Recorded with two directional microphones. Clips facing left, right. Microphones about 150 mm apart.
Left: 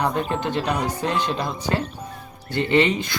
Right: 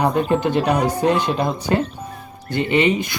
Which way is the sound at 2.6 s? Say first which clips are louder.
Right 2 dB; 15° right (ahead or behind).